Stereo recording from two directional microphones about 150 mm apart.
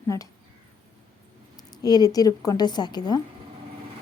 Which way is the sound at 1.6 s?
25° left (ahead or behind).